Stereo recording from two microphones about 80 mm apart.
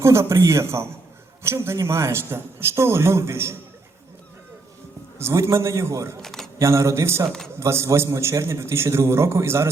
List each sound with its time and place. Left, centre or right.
0.0 s a man's voice: right
5.2 s a man's voice: right
6.2 s a sound: centre
6.6 s a man's voice: right